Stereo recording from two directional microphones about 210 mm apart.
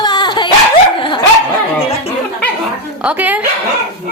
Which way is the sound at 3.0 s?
5° right (ahead or behind).